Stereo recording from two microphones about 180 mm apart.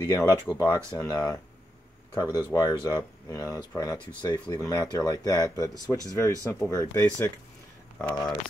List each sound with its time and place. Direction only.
0.0 s speech: 20° left (ahead or behind)